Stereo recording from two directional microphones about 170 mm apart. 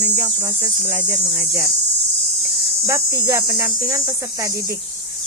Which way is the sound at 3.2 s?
20° right (ahead or behind).